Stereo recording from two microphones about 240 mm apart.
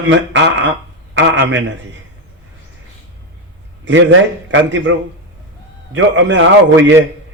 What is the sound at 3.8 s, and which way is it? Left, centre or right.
A man's voice, right.